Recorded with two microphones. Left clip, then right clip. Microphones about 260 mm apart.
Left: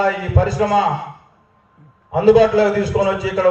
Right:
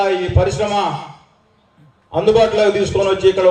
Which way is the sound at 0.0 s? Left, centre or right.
Right.